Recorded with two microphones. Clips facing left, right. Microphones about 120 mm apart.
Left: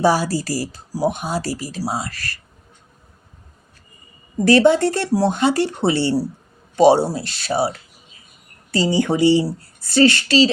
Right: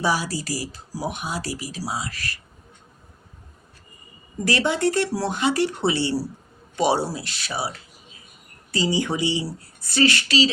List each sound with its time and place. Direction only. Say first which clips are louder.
0.0 s speech: left 7 dB; 35° left (ahead or behind)
1.8 s speech: left 5 dB; 55° left (ahead or behind)
4.4 s speech: left 8 dB; 30° left (ahead or behind)
8.7 s speech: left 5 dB; 35° left (ahead or behind)